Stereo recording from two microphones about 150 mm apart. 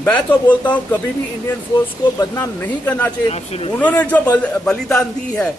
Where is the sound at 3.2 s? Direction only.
40° left (ahead or behind).